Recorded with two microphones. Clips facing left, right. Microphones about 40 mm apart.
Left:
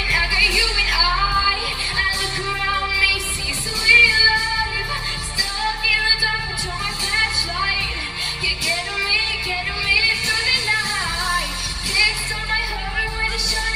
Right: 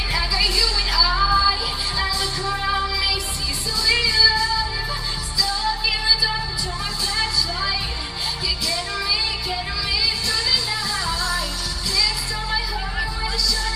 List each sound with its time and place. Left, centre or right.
0.1 s music: left
8.6 s music: left
11.9 s music: left